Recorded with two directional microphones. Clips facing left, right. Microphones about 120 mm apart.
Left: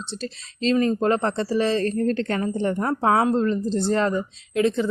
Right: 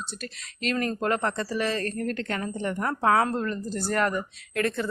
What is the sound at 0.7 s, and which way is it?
Speech, 15° left (ahead or behind).